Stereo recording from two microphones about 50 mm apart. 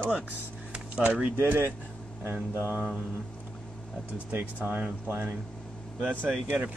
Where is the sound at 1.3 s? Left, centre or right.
Right.